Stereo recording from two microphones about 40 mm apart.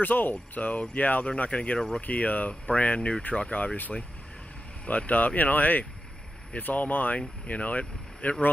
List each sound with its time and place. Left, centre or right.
0.0 s speech: left